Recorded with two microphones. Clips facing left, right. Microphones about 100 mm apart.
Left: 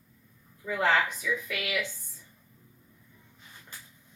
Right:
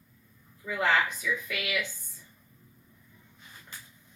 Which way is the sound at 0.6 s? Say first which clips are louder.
Left 1 dB; 30° left (ahead or behind).